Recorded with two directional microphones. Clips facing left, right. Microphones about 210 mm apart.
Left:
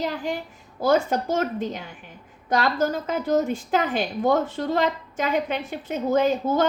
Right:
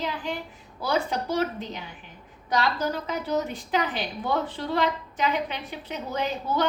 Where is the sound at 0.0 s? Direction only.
45° left (ahead or behind).